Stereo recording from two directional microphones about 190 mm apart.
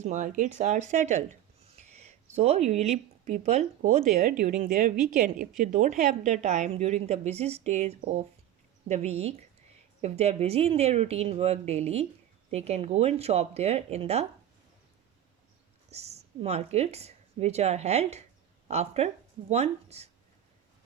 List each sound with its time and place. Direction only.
0.0 s speech: 40° right (ahead or behind)
15.9 s a woman's voice: 35° right (ahead or behind)